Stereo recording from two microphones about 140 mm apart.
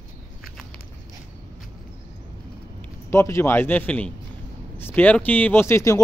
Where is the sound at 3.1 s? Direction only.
20° left (ahead or behind).